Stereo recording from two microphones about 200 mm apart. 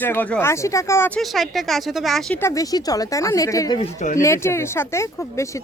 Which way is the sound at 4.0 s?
40° left (ahead or behind).